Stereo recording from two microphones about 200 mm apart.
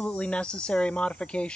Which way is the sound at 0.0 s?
5° left (ahead or behind).